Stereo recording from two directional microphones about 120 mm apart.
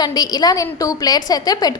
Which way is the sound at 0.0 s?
35° left (ahead or behind).